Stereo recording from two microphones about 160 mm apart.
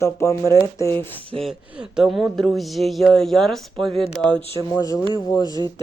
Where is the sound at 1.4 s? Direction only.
5° right (ahead or behind).